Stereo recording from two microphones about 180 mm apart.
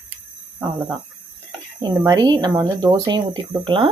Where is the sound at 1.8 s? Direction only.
20° right (ahead or behind).